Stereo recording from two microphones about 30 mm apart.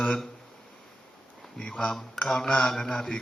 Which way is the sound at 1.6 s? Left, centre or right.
Left.